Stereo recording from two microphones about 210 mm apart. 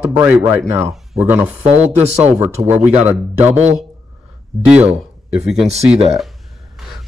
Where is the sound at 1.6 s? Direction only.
30° right (ahead or behind).